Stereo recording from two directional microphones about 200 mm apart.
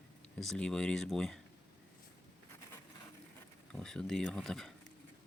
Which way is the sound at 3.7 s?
5° left (ahead or behind).